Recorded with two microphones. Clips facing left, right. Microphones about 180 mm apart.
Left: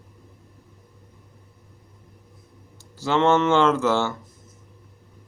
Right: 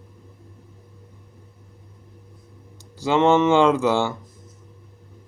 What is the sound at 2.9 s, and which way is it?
Speech, 15° right (ahead or behind).